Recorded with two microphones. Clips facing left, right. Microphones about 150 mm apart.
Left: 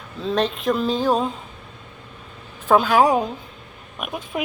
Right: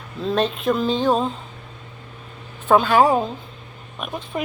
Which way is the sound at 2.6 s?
5° left (ahead or behind).